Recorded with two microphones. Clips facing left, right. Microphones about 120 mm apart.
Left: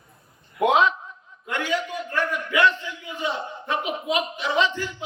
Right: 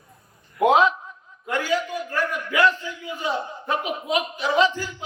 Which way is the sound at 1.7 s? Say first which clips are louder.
Right 1 dB; 40° right (ahead or behind).